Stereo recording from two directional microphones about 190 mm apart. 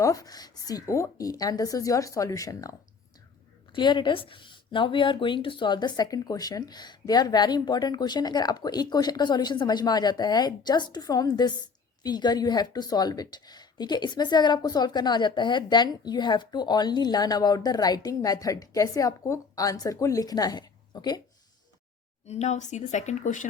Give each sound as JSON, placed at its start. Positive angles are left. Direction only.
{"t": 0.0, "sound": "a woman's voice", "side_deg": 15}
{"t": 3.8, "sound": "a woman's voice", "side_deg": 25}
{"t": 22.3, "sound": "speech", "side_deg": 35}